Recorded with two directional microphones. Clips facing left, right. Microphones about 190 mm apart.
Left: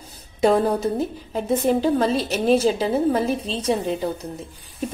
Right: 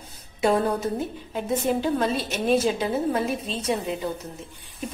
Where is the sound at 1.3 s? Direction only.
35° left (ahead or behind).